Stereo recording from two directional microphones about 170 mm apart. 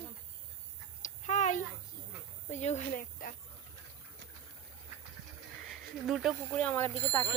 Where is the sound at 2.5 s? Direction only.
40° left (ahead or behind).